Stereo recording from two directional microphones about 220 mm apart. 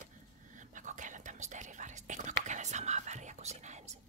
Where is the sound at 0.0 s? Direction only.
35° right (ahead or behind).